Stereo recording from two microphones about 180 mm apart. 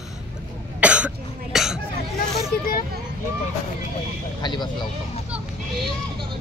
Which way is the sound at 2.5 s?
55° left (ahead or behind).